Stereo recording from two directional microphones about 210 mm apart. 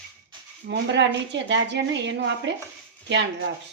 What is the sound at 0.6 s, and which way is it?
A woman's voice, 55° right (ahead or behind).